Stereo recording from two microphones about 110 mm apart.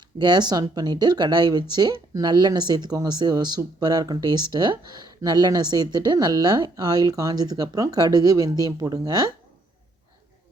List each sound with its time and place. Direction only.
0.2 s speech: 40° right (ahead or behind)